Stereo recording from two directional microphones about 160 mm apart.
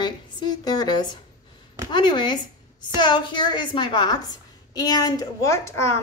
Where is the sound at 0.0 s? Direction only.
25° left (ahead or behind).